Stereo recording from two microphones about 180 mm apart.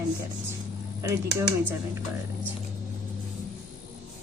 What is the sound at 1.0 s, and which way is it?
Speech, 15° right (ahead or behind).